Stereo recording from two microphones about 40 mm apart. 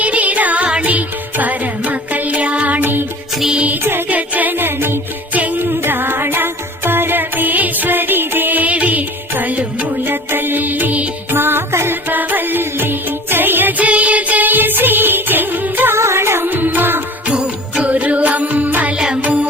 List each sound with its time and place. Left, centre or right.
0.0 s music: right
4.1 s music: right
4.5 s music: right
5.3 s music: right
5.5 s music: right
9.6 s music: right
10.0 s music: right
11.3 s music: right
12.0 s music: right
13.7 s music: right
15.9 s music: right
16.5 s music: right
17.2 s music: right
17.8 s music: right